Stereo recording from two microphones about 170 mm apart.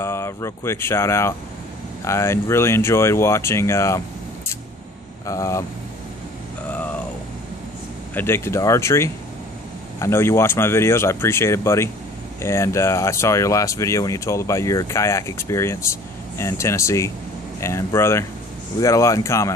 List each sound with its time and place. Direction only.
0.0 s speech: 15° left (ahead or behind)
5.2 s speech: 15° left (ahead or behind)
8.1 s speech: 10° left (ahead or behind)